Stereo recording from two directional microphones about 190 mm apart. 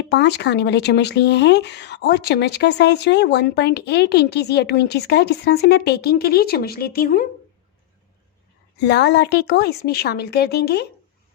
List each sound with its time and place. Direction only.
0.0 s speech: 60° left (ahead or behind)
8.7 s speech: 65° left (ahead or behind)